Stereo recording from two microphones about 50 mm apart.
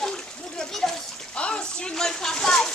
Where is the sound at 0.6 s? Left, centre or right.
Centre.